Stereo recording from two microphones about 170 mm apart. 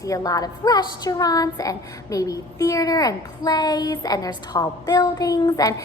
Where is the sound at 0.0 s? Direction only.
20° left (ahead or behind).